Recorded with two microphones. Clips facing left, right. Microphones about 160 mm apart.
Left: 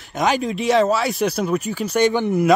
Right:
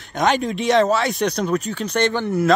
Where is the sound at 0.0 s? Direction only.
5° left (ahead or behind).